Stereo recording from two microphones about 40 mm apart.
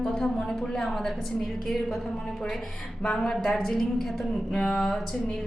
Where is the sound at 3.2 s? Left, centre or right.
Centre.